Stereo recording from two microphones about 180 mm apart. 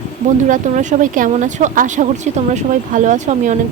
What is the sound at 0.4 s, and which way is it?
Speech, 45° right (ahead or behind).